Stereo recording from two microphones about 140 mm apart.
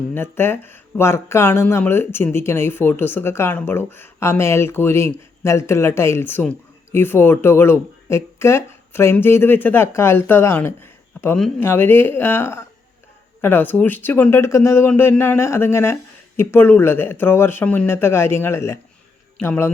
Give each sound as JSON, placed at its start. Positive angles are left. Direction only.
{"t": 0.1, "sound": "speech", "side_deg": 15}